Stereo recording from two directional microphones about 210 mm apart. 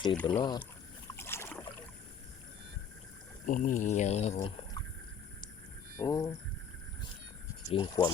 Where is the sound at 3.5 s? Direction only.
40° left (ahead or behind).